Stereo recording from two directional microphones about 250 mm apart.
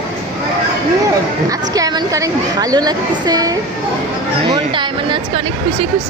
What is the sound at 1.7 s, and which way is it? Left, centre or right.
A woman's voice, centre.